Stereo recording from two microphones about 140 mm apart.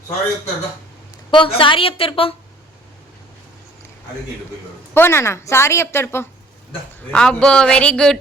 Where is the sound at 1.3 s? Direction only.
35° left (ahead or behind).